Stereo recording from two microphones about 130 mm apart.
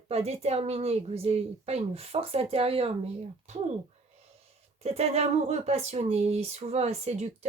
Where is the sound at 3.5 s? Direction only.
60° right (ahead or behind).